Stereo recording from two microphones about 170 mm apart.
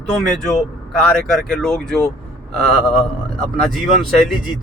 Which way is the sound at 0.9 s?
5° left (ahead or behind).